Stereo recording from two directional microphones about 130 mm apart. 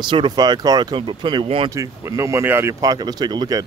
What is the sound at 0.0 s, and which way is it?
Speech, 40° right (ahead or behind).